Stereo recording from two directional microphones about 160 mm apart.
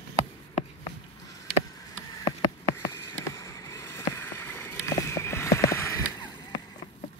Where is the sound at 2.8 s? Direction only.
20° left (ahead or behind).